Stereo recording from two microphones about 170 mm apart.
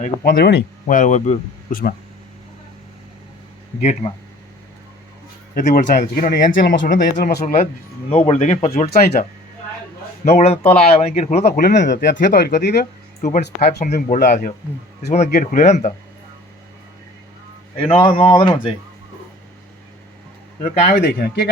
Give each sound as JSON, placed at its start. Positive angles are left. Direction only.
{"t": 0.0, "sound": "speech", "side_deg": 60}
{"t": 0.9, "sound": "speech", "side_deg": 45}
{"t": 3.8, "sound": "speech", "side_deg": 40}
{"t": 5.5, "sound": "speech", "side_deg": 45}
{"t": 8.1, "sound": "speech", "side_deg": 30}
{"t": 10.2, "sound": "speech", "side_deg": 40}
{"t": 12.0, "sound": "speech", "side_deg": 80}
{"t": 13.4, "sound": "speech", "side_deg": 65}
{"t": 17.7, "sound": "speech", "side_deg": 30}
{"t": 20.8, "sound": "speech", "side_deg": 55}